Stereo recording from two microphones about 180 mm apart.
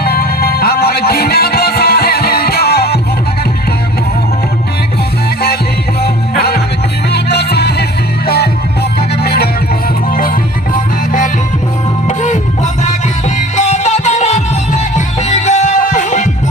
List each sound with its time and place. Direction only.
0.0 s music: 60° left (ahead or behind)
6.0 s music: 60° left (ahead or behind)
12.0 s music: 40° left (ahead or behind)